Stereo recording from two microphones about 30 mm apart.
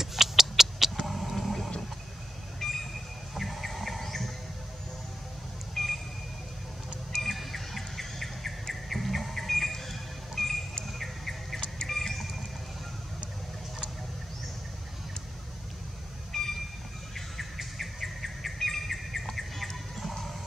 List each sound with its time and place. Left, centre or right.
0.0 s a sound: centre
1.0 s a sound: centre
2.6 s train: centre
3.3 s a sound: centre
5.8 s vehicle: centre
7.3 s insect: centre
8.8 s bird: centre
10.9 s cricket: centre
11.9 s vehicle: centre
16.3 s train: centre
17.7 s insect: centre
20.0 s music: centre